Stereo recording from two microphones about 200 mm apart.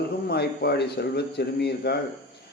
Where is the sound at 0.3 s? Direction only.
55° left (ahead or behind).